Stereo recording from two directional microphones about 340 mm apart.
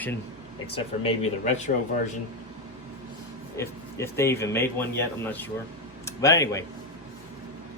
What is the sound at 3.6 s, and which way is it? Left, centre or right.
Speech, centre.